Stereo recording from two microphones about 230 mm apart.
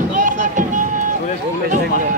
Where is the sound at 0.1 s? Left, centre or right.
Right.